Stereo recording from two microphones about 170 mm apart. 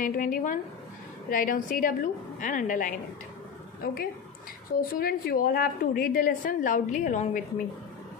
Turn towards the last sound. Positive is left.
turn(degrees=45)  # may be behind; listen again after turning